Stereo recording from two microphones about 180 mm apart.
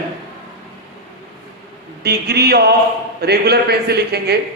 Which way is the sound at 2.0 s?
65° right (ahead or behind).